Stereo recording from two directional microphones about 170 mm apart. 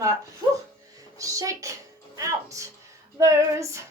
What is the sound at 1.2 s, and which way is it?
Child singing, 20° right (ahead or behind).